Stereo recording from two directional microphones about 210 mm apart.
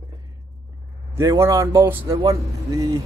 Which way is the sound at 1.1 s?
15° right (ahead or behind).